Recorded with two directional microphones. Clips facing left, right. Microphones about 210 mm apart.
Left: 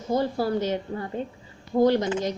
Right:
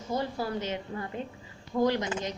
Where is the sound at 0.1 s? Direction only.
35° left (ahead or behind).